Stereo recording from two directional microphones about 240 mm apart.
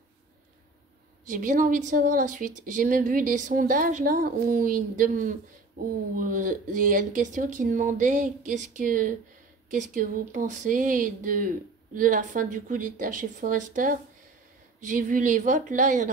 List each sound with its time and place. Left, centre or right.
1.3 s speech: right